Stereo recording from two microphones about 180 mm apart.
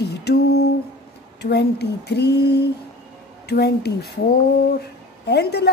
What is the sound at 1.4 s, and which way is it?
Speech, 65° left (ahead or behind).